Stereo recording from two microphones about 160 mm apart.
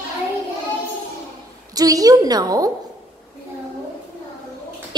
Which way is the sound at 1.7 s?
20° right (ahead or behind).